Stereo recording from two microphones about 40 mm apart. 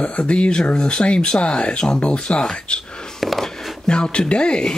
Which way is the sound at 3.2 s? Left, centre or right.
Centre.